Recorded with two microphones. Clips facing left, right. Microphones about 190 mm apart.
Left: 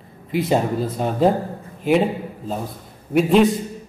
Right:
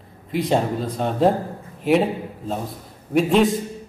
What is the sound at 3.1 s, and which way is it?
Speech, centre (ahead or behind).